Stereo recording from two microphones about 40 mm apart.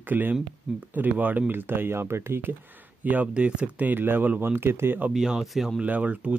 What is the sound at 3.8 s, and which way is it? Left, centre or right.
Speech, right.